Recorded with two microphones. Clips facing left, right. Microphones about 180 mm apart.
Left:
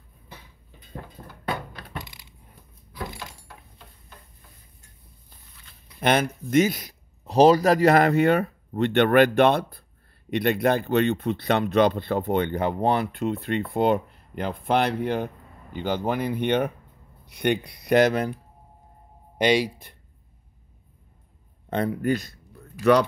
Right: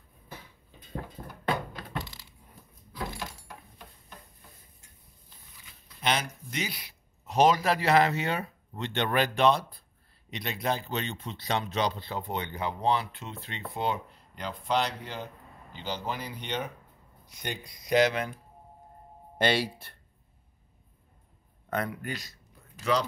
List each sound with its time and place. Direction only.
2.0 s coin: 15° left (ahead or behind)
3.2 s door: 15° right (ahead or behind)
5.9 s speech: 55° left (ahead or behind)
19.3 s speech: 15° left (ahead or behind)
21.6 s speech: 25° left (ahead or behind)
22.0 s speech: 50° left (ahead or behind)